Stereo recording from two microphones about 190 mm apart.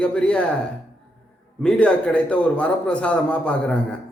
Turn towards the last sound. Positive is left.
turn(degrees=5)  # may be behind; listen again after turning